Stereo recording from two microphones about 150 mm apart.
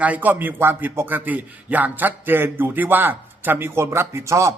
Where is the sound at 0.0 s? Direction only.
10° right (ahead or behind).